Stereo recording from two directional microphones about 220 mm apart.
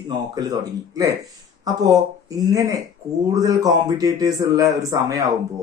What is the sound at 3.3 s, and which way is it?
Speech, 15° right (ahead or behind).